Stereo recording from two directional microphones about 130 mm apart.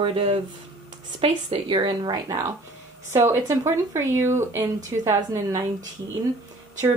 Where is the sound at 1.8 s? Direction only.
35° right (ahead or behind).